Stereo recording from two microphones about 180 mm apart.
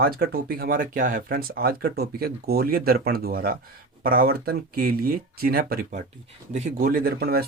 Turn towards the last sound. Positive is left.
turn(degrees=-60)  # may be behind; listen again after turning